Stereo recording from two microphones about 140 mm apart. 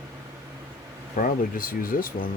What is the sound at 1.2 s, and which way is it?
Speech, 80° left.